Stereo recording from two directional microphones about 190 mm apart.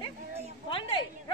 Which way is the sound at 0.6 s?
25° left (ahead or behind).